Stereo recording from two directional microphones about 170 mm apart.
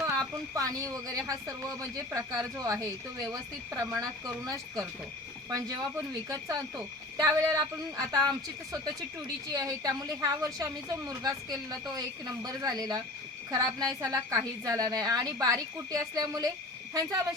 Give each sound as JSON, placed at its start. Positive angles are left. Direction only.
{"t": 0.0, "sound": "speech", "side_deg": -20}